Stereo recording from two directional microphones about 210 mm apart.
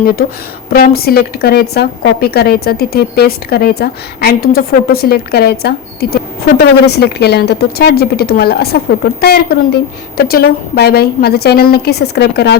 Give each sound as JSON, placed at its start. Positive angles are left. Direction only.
{"t": 0.0, "sound": "a woman's voice", "side_deg": 45}